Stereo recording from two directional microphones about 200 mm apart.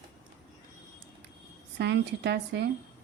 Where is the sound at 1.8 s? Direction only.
55° right (ahead or behind).